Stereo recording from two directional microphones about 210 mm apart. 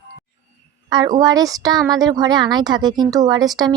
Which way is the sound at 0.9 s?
20° right (ahead or behind).